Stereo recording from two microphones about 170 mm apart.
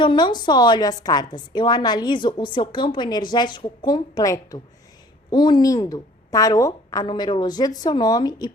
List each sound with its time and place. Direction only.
0.0 s a woman's voice: 25° left (ahead or behind)